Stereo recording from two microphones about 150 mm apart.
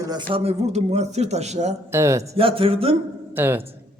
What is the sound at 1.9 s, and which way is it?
Speech, 20° right (ahead or behind).